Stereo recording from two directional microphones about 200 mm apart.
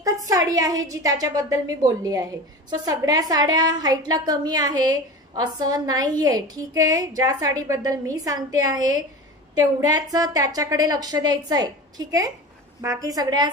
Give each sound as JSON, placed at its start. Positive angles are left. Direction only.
{"t": 0.0, "sound": "a woman's voice", "side_deg": -15}